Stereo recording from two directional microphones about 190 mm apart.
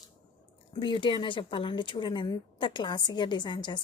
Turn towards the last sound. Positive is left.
turn(degrees=25)  # may be behind; listen again after turning